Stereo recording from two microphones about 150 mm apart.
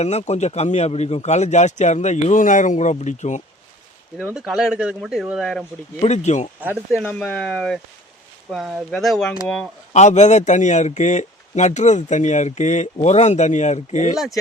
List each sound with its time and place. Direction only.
0.0 s a man's voice: 45° left (ahead or behind)
4.2 s speech: 5° right (ahead or behind)
6.0 s a man's voice: 50° left (ahead or behind)
6.6 s speech: 10° right (ahead or behind)
7.0 s speech: 10° left (ahead or behind)
9.9 s a man's voice: 50° left (ahead or behind)